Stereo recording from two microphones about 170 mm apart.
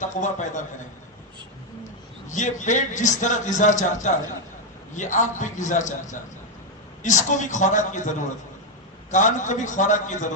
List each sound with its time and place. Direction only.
0.0 s a man's voice: 45° left (ahead or behind)
2.3 s a man's voice: 45° left (ahead or behind)